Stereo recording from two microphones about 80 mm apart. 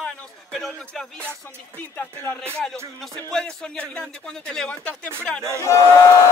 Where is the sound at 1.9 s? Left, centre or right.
Left.